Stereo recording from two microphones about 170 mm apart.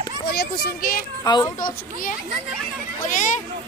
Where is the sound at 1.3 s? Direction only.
25° left (ahead or behind).